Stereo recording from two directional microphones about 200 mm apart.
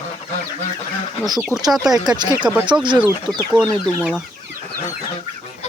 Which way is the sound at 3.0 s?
10° left (ahead or behind).